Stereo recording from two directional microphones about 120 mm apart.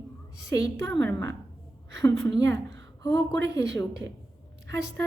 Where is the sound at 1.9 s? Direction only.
30° left (ahead or behind).